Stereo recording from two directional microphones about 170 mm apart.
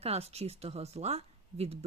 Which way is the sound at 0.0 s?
35° right (ahead or behind).